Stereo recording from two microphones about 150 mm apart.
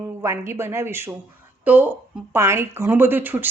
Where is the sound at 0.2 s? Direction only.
15° right (ahead or behind).